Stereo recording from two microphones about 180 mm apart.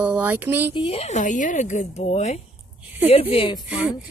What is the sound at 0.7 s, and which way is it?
Speech, 30° left (ahead or behind).